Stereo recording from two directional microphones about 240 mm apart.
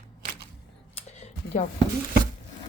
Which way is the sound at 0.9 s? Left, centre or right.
Left.